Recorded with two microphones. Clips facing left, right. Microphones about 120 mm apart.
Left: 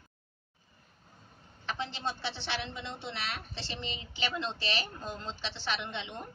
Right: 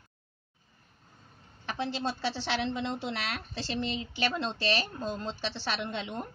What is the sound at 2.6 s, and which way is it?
Speech, 60° right (ahead or behind).